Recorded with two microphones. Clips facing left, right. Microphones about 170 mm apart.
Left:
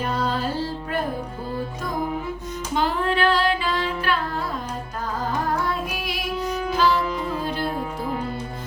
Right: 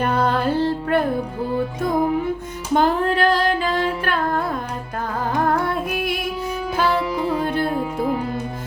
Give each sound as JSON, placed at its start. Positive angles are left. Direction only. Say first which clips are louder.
{"t": 0.0, "sound": "music", "louder": "right 5 dB", "side_deg": -60}
{"t": 2.7, "sound": "female singing", "louder": "right 5 dB", "side_deg": -45}
{"t": 5.5, "sound": "music", "louder": "right 4 dB", "side_deg": -55}